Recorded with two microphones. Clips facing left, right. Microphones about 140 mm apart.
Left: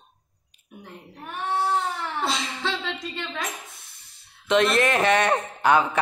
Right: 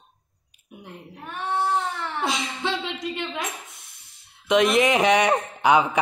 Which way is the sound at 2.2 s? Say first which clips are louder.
Right 2 dB; 15° right (ahead or behind).